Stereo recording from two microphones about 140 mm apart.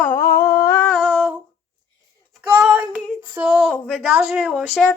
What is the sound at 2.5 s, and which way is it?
Speech, 10° right (ahead or behind).